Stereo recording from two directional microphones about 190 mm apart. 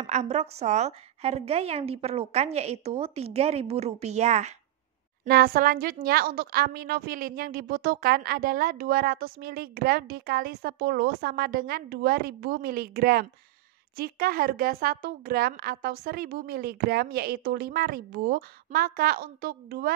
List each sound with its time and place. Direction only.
0.0 s a woman's voice: 35° right (ahead or behind)
5.3 s a woman's voice: 50° right (ahead or behind)